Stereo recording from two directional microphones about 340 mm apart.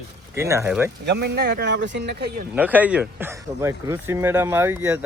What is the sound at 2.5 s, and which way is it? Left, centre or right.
Speech, centre.